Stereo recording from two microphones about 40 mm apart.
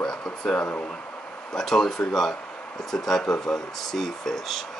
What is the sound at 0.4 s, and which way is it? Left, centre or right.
Speech, left.